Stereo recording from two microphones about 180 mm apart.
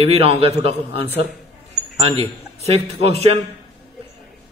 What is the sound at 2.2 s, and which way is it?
Speech, 35° right (ahead or behind).